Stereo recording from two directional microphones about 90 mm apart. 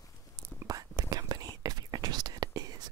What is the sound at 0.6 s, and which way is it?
Whispering, 45° right (ahead or behind).